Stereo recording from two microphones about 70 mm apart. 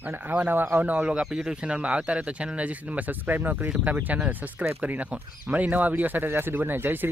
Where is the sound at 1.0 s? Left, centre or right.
Centre; by 4.8 s right.